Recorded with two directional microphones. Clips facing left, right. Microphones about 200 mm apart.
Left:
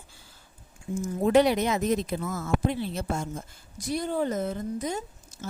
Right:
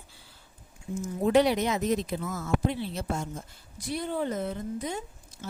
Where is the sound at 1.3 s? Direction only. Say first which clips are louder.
Left 2 dB; 50° left (ahead or behind).